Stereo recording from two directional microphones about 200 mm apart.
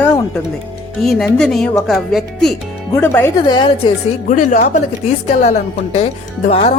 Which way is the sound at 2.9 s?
10° left (ahead or behind).